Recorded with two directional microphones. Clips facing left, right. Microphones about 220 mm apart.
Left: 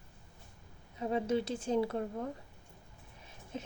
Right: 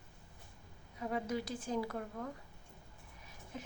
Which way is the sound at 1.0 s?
25° left (ahead or behind).